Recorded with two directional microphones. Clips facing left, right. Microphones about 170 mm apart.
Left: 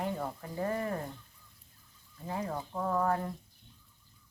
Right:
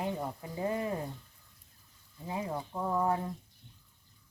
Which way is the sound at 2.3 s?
15° right (ahead or behind).